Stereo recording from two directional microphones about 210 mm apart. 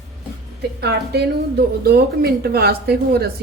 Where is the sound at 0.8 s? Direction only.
50° right (ahead or behind).